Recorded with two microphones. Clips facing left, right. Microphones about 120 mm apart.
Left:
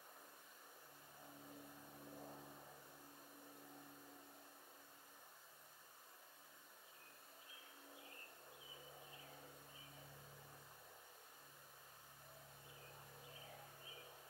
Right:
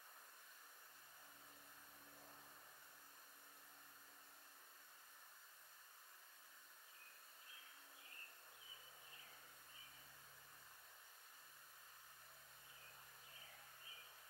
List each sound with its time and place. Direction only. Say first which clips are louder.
2.1 s vehicle: left 10 dB; 40° left (ahead or behind)